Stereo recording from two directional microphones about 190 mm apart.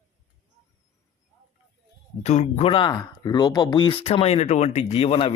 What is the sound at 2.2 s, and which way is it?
Speech, 35° left (ahead or behind).